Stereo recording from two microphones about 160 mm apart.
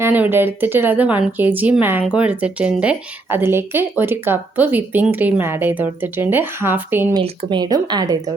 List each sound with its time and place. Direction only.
0.0 s speech: 10° right (ahead or behind)
7.1 s speech: 25° right (ahead or behind)